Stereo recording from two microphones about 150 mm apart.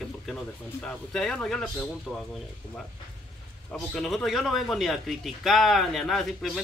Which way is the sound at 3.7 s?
5° left (ahead or behind).